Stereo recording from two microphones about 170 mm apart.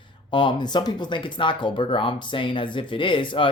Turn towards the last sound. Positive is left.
turn(degrees=30)  # may be behind; listen again after turning